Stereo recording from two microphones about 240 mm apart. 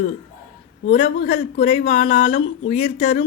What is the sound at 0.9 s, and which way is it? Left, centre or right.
Speech, left.